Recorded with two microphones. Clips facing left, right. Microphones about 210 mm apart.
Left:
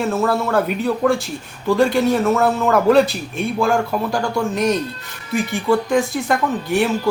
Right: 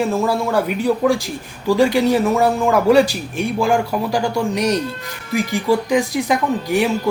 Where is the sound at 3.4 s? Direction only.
15° right (ahead or behind).